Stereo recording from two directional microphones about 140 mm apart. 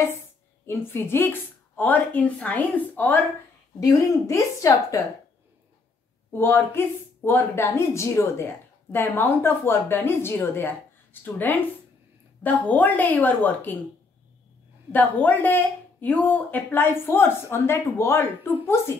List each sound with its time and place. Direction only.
0.7 s speech: 15° left (ahead or behind)
3.8 s a woman's voice: 25° left (ahead or behind)
6.3 s speech: 15° left (ahead or behind)
14.9 s speech: 10° left (ahead or behind)